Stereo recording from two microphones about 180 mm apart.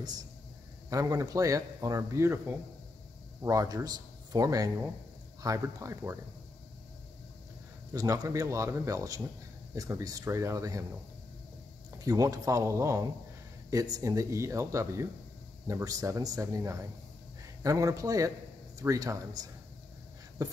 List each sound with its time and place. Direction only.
0.0 s a man's voice: 20° right (ahead or behind)
7.9 s a man's voice: 20° right (ahead or behind)
12.0 s a man's voice: 20° right (ahead or behind)